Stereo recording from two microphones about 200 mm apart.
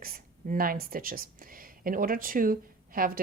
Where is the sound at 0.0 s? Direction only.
45° right (ahead or behind).